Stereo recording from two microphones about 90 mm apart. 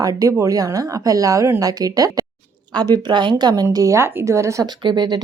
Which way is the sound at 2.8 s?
55° right (ahead or behind).